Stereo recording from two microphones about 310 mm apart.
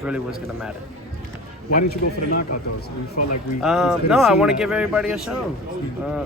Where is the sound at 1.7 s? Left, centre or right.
Left.